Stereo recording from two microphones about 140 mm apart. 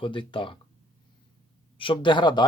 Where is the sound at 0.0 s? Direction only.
35° left (ahead or behind).